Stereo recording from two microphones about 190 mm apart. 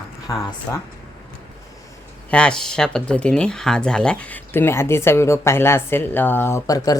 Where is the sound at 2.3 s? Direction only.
5° left (ahead or behind).